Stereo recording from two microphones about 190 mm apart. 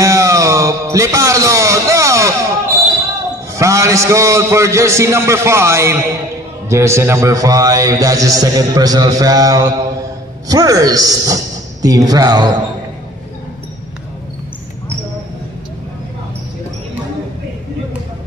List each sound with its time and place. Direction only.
0.0 s music: 15° right (ahead or behind)
3.5 s a man's voice: 15° right (ahead or behind)